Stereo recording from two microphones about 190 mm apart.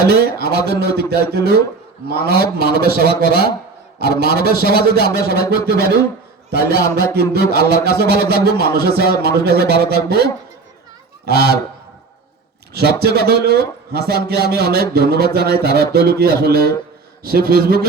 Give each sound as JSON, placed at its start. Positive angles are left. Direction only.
{"t": 0.1, "sound": "a man's voice", "side_deg": -55}
{"t": 11.3, "sound": "speech", "side_deg": -55}
{"t": 12.7, "sound": "a man's voice", "side_deg": -55}